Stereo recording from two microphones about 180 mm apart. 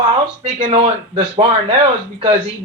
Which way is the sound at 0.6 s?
35° right (ahead or behind).